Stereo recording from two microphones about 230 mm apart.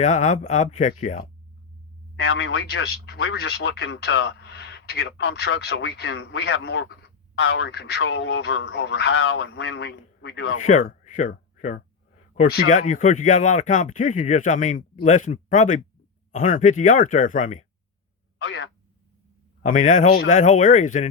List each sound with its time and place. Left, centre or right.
0.0 s speech: left
2.2 s speech: left
2.6 s speech: left
8.0 s speech: left
10.6 s speech: left
18.4 s speech: left
19.6 s speech: left